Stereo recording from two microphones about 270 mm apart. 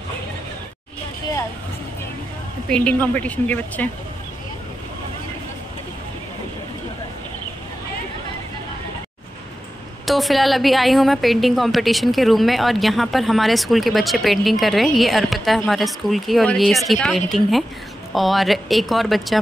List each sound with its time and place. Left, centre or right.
2.7 s a woman's voice: centre
10.0 s a woman's voice: centre